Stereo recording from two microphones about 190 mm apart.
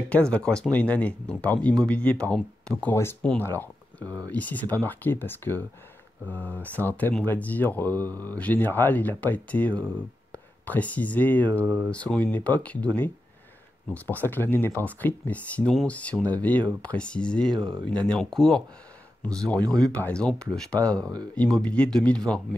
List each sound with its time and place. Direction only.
0.1 s speech: 5° left (ahead or behind)
4.0 s speech: 20° right (ahead or behind)
4.3 s speech: 10° left (ahead or behind)
6.8 s speech: 10° left (ahead or behind)
8.1 s speech: 20° right (ahead or behind)
8.4 s speech: 10° left (ahead or behind)
11.6 s speech: 10° right (ahead or behind)
11.9 s speech: 5° left (ahead or behind)